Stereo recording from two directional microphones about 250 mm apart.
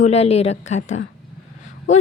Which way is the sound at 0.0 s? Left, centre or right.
Left.